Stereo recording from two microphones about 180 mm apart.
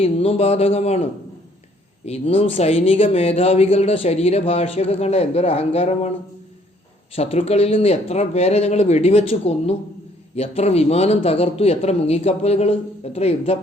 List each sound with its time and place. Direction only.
0.0 s speech: 35° left (ahead or behind)
2.0 s speech: 35° left (ahead or behind)
7.2 s speech: 35° left (ahead or behind)